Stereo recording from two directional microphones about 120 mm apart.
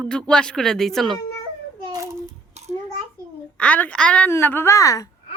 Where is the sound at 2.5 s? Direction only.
65° right (ahead or behind).